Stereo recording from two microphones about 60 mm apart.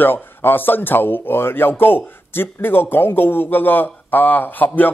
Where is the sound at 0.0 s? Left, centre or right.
Left.